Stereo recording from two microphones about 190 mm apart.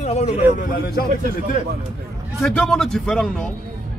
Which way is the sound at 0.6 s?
55° left (ahead or behind).